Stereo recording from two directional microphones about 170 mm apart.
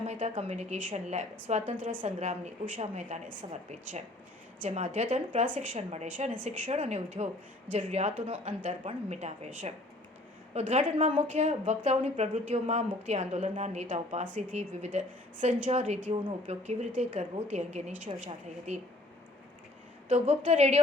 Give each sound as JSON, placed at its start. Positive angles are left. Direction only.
{"t": 0.1, "sound": "a woman's voice", "side_deg": -40}
{"t": 10.5, "sound": "a woman's voice", "side_deg": -45}
{"t": 20.1, "sound": "a woman's voice", "side_deg": -45}